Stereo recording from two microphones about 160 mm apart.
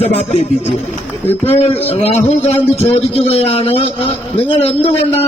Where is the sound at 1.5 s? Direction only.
40° left (ahead or behind).